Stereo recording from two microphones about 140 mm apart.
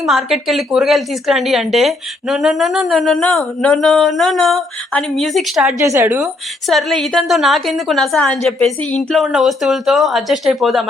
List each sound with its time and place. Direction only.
0.0 s speech: centre (ahead or behind)
5.8 s speech: 20° right (ahead or behind)
6.7 s speech: centre (ahead or behind)